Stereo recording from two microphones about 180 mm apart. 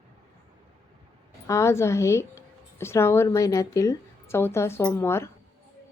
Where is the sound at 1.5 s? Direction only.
15° left (ahead or behind).